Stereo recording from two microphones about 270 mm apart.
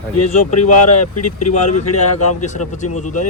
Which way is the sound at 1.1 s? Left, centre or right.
Left.